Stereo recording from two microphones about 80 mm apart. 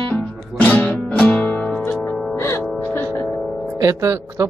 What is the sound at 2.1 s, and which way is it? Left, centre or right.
Music, centre.